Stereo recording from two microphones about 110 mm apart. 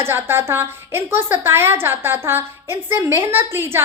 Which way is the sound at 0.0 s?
20° right (ahead or behind).